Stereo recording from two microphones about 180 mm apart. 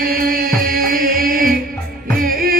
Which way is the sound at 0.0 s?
55° right (ahead or behind).